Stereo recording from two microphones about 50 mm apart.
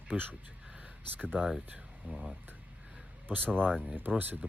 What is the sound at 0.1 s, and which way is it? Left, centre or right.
Speech, right.